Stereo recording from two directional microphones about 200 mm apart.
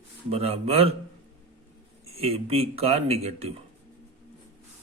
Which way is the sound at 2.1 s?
30° right (ahead or behind).